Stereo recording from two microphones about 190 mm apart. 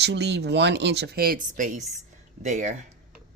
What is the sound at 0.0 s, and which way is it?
Speech, 65° right (ahead or behind).